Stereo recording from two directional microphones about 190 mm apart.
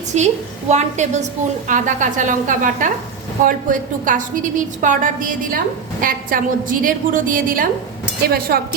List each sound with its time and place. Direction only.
0.1 s a woman's voice: 35° right (ahead or behind); by 8.6 s 55° right (ahead or behind)